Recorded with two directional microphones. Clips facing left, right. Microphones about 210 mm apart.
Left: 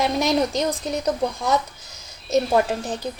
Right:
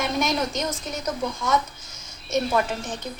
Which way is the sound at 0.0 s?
35° left (ahead or behind).